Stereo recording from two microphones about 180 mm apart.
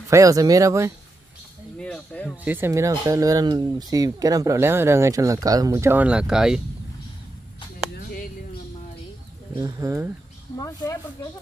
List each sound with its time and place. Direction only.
0.1 s speech: 20° right (ahead or behind)
1.8 s speech: 5° left (ahead or behind)
2.4 s speech: 10° right (ahead or behind)
9.6 s speech: 20° right (ahead or behind)
10.6 s speech: 20° left (ahead or behind)